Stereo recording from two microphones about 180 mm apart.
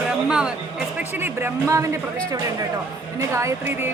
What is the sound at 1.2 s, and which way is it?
Speech, 15° right (ahead or behind).